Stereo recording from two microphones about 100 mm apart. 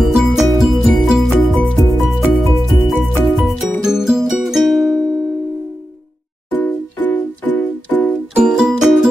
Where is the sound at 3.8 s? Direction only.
5° right (ahead or behind).